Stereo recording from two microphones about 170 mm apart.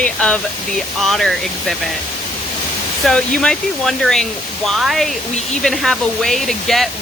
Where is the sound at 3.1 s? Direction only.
5° left (ahead or behind).